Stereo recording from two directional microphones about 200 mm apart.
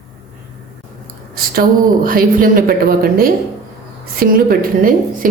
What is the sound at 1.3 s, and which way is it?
A woman's voice, 45° right (ahead or behind).